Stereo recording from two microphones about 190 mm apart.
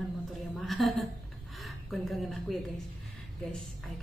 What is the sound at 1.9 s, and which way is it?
Speech, centre (ahead or behind).